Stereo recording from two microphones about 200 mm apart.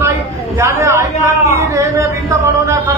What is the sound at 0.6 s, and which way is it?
A man's voice, 15° right (ahead or behind).